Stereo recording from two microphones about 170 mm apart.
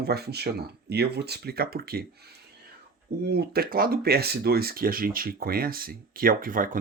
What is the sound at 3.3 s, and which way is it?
Speech, 65° right (ahead or behind).